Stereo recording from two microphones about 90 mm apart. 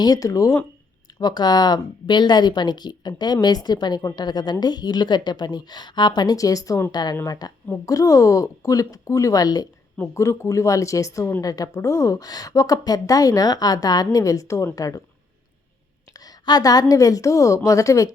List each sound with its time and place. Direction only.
0.0 s speech: 45° left (ahead or behind)
1.2 s a woman's voice: 50° left (ahead or behind)
10.0 s a woman's voice: 30° left (ahead or behind)
16.1 s a sound: 45° left (ahead or behind)
16.9 s speech: 40° left (ahead or behind)